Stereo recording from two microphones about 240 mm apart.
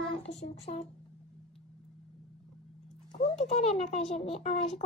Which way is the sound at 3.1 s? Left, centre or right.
Left.